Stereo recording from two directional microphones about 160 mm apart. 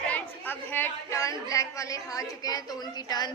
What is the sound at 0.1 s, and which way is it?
A woman's voice, 15° left (ahead or behind).